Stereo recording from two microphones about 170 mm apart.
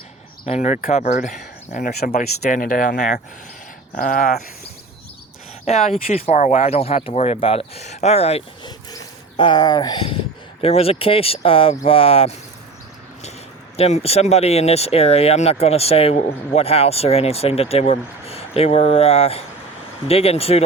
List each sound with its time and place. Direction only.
0.4 s speech: 40° left (ahead or behind)
6.1 s speech: 40° left (ahead or behind)
9.4 s speech: 25° left (ahead or behind)
13.7 s speech: 40° left (ahead or behind)